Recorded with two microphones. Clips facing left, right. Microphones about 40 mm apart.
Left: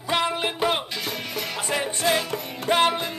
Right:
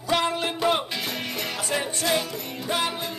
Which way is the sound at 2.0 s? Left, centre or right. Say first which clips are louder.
Left 3 dB; left.